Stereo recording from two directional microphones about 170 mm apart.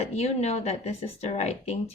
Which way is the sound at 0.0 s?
40° left (ahead or behind).